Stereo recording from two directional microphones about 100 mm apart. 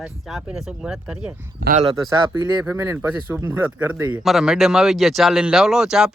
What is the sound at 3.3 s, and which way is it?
Speech, 20° right (ahead or behind).